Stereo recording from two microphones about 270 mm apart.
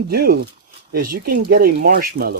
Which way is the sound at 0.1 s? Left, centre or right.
Right.